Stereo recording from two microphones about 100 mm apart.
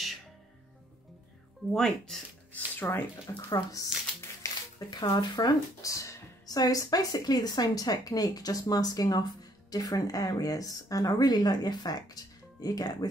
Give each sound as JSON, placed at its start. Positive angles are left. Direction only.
{"t": 1.7, "sound": "speech", "side_deg": 5}
{"t": 2.5, "sound": "speech", "side_deg": 20}
{"t": 3.5, "sound": "speech", "side_deg": 35}